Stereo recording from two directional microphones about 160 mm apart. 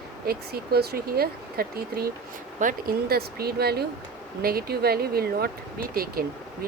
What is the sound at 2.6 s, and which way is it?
Speech, 60° right (ahead or behind).